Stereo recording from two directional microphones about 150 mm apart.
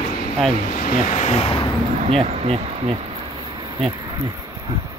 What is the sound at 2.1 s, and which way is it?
Speech, 45° right (ahead or behind).